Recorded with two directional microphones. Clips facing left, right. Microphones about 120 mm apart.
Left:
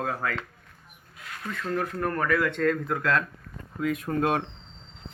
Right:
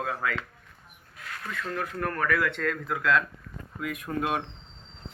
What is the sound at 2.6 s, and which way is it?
Speech, 35° left (ahead or behind).